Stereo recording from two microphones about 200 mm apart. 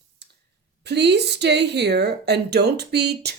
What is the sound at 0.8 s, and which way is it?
Speech, 55° right (ahead or behind).